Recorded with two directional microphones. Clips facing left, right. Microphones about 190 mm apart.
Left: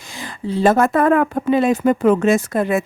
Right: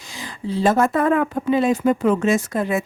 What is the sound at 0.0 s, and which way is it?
Speech, 55° left (ahead or behind).